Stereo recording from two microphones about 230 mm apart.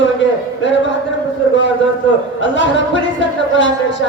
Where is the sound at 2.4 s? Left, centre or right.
Left.